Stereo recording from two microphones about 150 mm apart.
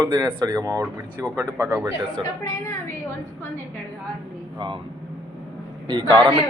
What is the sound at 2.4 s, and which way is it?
Speech, 20° left (ahead or behind).